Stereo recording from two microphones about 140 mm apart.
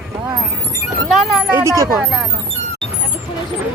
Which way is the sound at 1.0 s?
Centre (ahead or behind).